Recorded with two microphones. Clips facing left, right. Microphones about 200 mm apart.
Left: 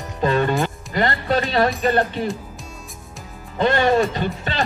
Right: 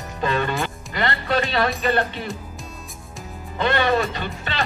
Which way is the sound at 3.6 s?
40° left (ahead or behind).